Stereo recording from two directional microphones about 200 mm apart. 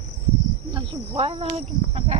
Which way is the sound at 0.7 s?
25° right (ahead or behind).